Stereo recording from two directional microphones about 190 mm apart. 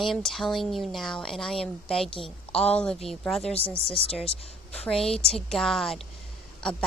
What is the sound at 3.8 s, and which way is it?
Speech, 30° right (ahead or behind).